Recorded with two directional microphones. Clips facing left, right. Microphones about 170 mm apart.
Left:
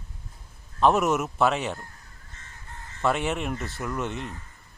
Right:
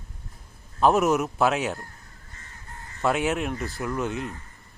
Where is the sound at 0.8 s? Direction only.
Centre (ahead or behind).